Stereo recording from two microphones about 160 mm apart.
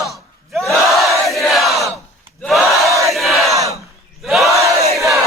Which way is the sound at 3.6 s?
20° right (ahead or behind).